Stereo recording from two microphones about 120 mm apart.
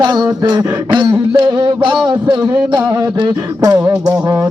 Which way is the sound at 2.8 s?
25° right (ahead or behind).